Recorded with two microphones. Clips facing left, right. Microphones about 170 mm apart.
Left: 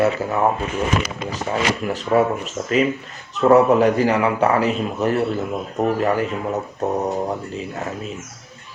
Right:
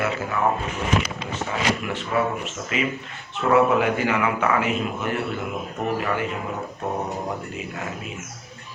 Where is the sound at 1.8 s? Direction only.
40° left (ahead or behind).